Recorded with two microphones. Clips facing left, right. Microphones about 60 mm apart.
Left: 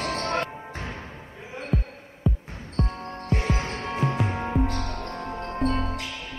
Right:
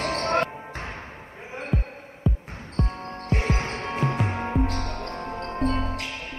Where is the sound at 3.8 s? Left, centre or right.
Centre.